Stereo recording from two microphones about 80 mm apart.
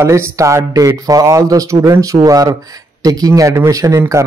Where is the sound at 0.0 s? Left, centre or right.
Right.